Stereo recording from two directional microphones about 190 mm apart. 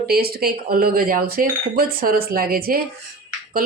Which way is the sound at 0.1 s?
55° right (ahead or behind).